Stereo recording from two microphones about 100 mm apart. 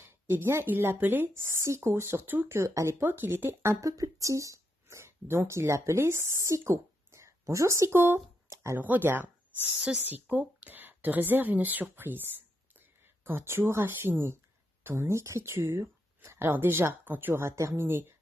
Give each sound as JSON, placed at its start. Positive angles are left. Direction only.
{"t": 0.3, "sound": "speech", "side_deg": -25}